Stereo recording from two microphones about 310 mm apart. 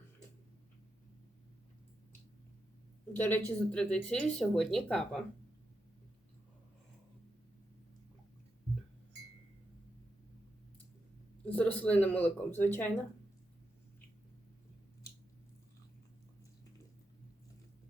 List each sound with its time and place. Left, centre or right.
3.1 s speech: centre
11.4 s a sound: centre
11.8 s speech: centre